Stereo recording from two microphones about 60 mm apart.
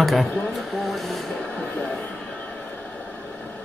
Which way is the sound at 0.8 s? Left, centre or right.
Centre.